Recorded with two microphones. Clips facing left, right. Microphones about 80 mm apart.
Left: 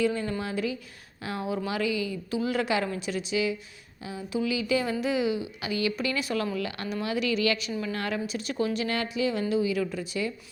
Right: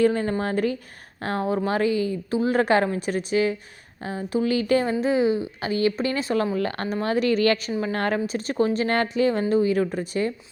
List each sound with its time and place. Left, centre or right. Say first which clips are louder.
0.0 s a woman's voice: right 6 dB; right
4.9 s a woman's voice: right 6 dB; right